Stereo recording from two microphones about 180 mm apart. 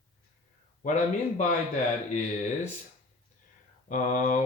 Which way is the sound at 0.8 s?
40° left (ahead or behind).